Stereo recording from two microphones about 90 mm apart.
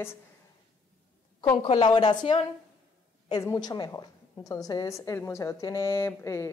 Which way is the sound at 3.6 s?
50° left (ahead or behind).